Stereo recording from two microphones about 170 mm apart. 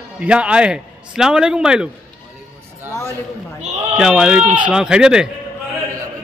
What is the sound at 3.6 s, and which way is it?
Speech, 40° right (ahead or behind).